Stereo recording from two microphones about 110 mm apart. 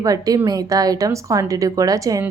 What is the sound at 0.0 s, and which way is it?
Speech, 35° right (ahead or behind).